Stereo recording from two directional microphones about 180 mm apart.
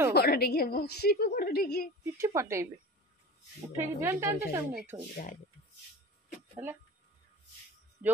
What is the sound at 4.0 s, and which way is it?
Speech, 15° right (ahead or behind).